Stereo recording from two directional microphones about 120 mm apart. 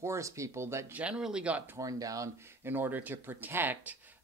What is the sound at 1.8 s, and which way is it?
Speech, 30° right (ahead or behind).